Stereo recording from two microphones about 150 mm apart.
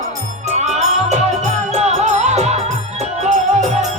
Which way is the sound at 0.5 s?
50° right (ahead or behind).